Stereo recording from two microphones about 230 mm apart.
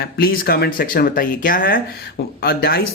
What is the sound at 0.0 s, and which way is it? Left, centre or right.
Speech, left.